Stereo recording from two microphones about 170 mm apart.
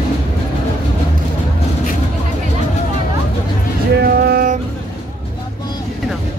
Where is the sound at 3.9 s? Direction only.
65° right (ahead or behind).